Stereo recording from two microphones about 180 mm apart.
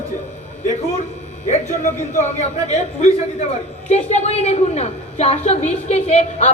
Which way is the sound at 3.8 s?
40° left (ahead or behind).